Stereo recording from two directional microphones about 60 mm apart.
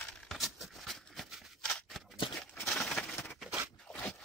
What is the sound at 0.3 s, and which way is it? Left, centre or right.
Scissors, centre.